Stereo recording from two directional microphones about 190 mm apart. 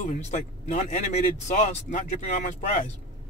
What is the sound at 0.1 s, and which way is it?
Speech, 40° left (ahead or behind).